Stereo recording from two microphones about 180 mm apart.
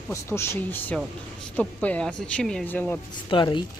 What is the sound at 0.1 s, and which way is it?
Speech, 15° left (ahead or behind).